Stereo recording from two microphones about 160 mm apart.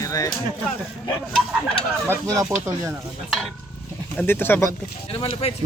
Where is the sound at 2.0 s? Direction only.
20° right (ahead or behind).